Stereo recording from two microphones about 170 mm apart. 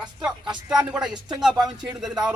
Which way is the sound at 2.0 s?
5° right (ahead or behind).